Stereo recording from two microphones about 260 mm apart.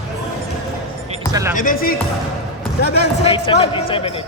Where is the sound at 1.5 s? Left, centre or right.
Left.